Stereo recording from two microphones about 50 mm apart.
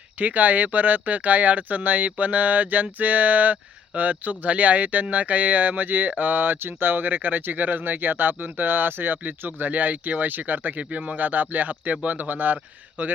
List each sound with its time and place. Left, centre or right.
0.2 s speech: right